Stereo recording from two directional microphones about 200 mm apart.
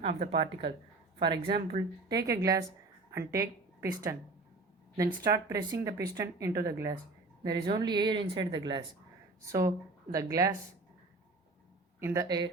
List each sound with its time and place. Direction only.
0.2 s a woman's voice: 30° right (ahead or behind); by 4.2 s 15° right (ahead or behind)
5.2 s speech: 15° right (ahead or behind)
11.9 s speech: 15° right (ahead or behind)